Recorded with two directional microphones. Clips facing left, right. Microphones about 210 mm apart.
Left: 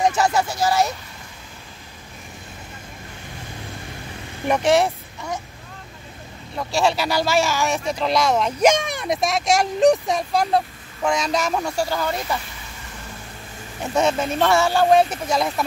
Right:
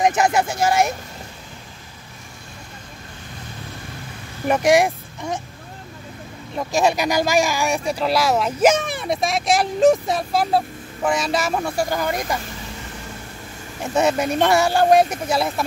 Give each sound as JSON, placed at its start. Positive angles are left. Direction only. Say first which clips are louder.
{"t": 0.0, "sound": "speech", "louder": "right 1 dB", "side_deg": -20}
{"t": 4.5, "sound": "speech", "louder": "right 2 dB", "side_deg": -10}
{"t": 6.5, "sound": "speech", "louder": "right 2 dB", "side_deg": -15}
{"t": 13.9, "sound": "speech", "louder": "right 1 dB", "side_deg": -10}